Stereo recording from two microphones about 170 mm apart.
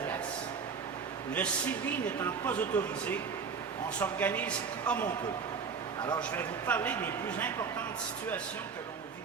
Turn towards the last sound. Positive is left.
turn(degrees=10)  # may be behind; listen again after turning